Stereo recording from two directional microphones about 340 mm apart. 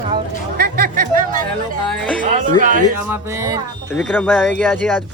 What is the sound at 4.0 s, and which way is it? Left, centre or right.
Speech, centre.